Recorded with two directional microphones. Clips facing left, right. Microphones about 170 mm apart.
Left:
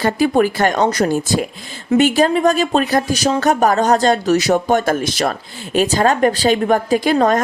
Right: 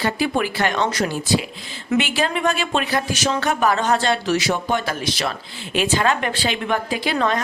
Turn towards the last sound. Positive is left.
turn(degrees=45)  # may be behind; listen again after turning